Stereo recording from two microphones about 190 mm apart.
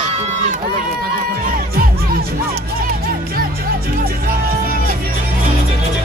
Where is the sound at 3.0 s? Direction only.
50° right (ahead or behind).